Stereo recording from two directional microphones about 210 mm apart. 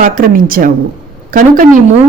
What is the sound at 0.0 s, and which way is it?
Speech, 40° right (ahead or behind).